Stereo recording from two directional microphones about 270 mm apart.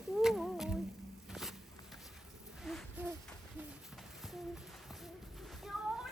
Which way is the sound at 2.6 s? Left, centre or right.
Centre.